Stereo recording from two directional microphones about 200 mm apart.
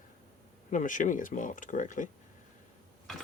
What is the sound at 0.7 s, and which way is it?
Speech, 40° left (ahead or behind).